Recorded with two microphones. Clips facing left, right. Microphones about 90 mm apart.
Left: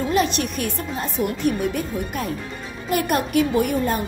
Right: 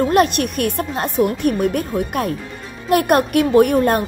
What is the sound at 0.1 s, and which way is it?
Speech, 55° right (ahead or behind).